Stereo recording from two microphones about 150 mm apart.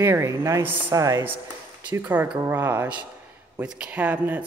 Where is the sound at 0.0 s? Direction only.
20° right (ahead or behind).